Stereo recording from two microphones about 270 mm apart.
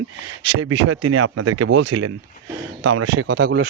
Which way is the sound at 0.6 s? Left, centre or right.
Right.